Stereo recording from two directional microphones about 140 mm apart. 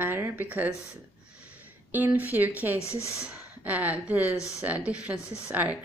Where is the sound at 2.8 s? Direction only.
20° left (ahead or behind).